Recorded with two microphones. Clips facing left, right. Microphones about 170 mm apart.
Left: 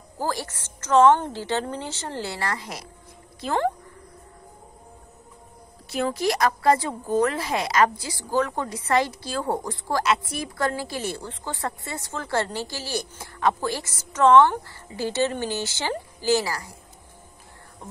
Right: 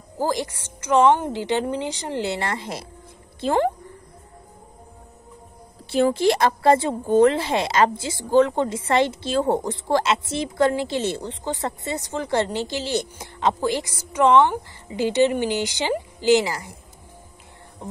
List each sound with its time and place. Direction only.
0.2 s a woman's voice: 15° right (ahead or behind)
5.9 s speech: 30° right (ahead or behind)